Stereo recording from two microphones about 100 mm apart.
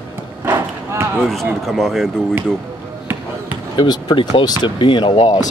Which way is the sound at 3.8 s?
45° left (ahead or behind).